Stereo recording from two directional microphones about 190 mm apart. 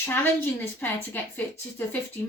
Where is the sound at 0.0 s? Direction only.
10° left (ahead or behind).